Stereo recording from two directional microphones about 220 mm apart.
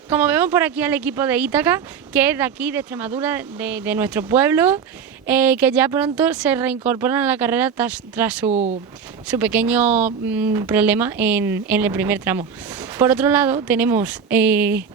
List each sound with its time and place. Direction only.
0.1 s speech: 10° right (ahead or behind)
8.4 s speech: 30° right (ahead or behind)
9.2 s speech: 10° right (ahead or behind)